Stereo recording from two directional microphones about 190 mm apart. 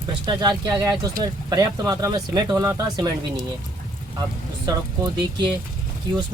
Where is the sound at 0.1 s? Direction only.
20° right (ahead or behind).